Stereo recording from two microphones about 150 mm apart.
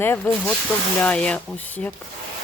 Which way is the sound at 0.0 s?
10° left (ahead or behind).